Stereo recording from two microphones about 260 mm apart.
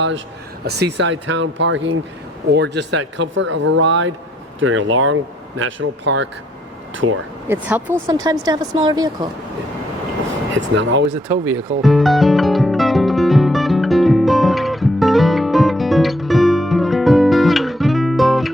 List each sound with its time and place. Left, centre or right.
0.6 s speech: right
7.4 s speech: centre
10.5 s speech: right
11.1 s speech: centre
11.8 s music: centre